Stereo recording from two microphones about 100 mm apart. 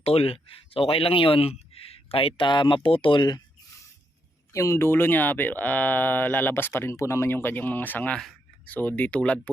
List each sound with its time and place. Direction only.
0.0 s speech: 85° left; by 3.4 s 45° left (ahead or behind)
4.5 s speech: 30° left (ahead or behind); by 9.5 s 15° left (ahead or behind)